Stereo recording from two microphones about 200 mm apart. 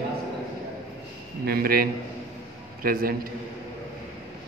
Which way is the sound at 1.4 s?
50° right (ahead or behind).